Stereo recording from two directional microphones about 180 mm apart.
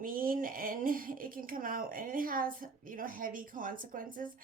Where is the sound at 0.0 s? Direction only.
50° right (ahead or behind).